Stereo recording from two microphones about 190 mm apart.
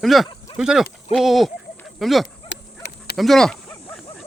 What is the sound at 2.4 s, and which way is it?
Dog, 60° left (ahead or behind).